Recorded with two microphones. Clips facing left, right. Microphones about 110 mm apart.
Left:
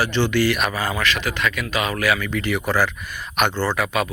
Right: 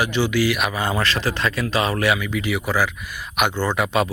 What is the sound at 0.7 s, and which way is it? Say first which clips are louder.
Speech: right 1 dB; 25° right (ahead or behind).